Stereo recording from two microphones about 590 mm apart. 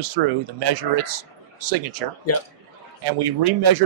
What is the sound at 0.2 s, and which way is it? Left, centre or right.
A man's voice, right.